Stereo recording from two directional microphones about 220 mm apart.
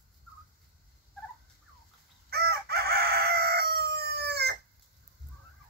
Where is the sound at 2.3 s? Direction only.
45° right (ahead or behind).